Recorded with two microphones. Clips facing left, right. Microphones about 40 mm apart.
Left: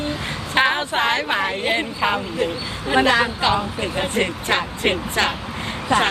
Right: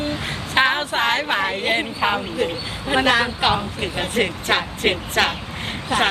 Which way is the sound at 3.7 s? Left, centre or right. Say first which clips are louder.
Even; right.